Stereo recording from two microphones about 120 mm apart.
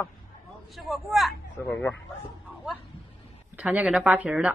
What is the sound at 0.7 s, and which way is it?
Speech, centre (ahead or behind).